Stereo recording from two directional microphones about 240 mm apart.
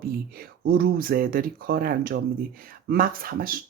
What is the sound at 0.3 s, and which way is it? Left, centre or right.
Speech, right.